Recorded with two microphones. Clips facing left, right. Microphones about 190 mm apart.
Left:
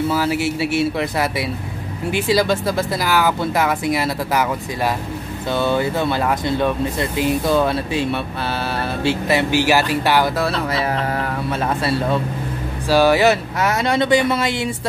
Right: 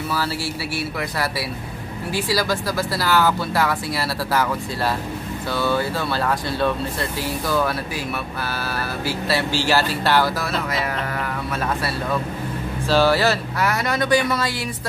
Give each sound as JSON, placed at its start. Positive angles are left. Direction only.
{"t": 0.1, "sound": "speech", "side_deg": 20}
{"t": 3.1, "sound": "speech", "side_deg": 15}
{"t": 10.3, "sound": "music", "side_deg": 30}
{"t": 12.8, "sound": "speech", "side_deg": 15}